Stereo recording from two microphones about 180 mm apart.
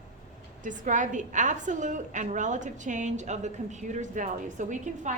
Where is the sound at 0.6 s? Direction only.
45° right (ahead or behind).